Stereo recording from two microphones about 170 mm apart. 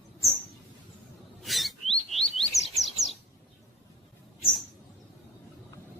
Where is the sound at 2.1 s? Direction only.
Centre (ahead or behind).